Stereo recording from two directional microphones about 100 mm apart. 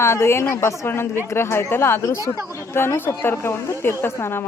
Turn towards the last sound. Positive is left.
turn(degrees=25)  # may be behind; listen again after turning